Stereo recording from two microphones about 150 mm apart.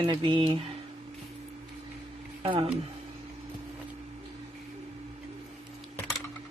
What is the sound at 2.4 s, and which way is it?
Speech, 40° right (ahead or behind).